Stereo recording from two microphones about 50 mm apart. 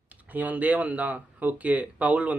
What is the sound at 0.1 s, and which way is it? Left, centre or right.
Speech, right.